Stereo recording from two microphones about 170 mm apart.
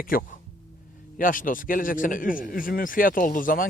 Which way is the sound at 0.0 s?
55° left (ahead or behind).